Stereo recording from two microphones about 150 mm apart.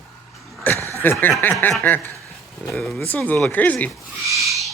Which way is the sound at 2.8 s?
Centre (ahead or behind).